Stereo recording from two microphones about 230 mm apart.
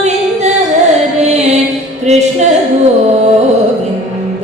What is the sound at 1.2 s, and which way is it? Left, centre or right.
Music, right.